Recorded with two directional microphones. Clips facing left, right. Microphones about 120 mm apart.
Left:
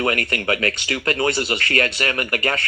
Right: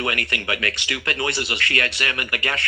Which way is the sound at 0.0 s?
40° left (ahead or behind).